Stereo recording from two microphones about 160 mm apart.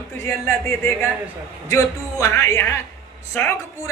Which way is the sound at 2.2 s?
15° left (ahead or behind).